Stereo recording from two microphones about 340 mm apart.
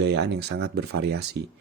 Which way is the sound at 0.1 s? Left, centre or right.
Right.